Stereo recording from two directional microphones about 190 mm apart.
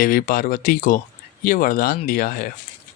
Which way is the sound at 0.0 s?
50° left (ahead or behind).